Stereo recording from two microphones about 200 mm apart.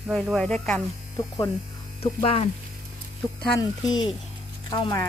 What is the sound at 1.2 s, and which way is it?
Speech, 15° left (ahead or behind).